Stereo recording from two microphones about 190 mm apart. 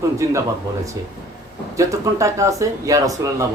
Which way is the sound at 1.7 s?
15° right (ahead or behind).